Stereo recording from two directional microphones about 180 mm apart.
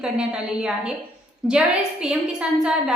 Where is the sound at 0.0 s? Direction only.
5° right (ahead or behind).